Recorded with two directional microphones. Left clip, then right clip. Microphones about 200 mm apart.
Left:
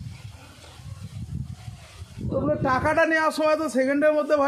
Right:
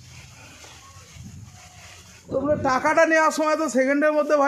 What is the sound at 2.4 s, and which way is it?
A man's voice, 40° right (ahead or behind).